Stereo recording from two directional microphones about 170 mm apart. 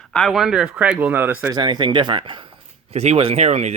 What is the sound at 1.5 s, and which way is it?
Speech, 25° right (ahead or behind).